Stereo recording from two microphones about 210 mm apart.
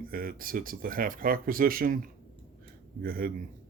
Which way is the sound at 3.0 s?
45° right (ahead or behind).